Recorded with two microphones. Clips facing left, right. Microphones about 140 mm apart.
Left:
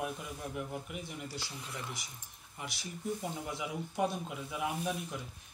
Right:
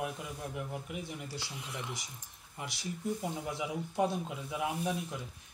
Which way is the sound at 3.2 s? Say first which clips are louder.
Right 2 dB; 20° right (ahead or behind).